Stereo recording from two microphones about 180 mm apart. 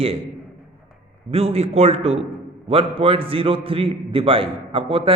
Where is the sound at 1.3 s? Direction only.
35° right (ahead or behind).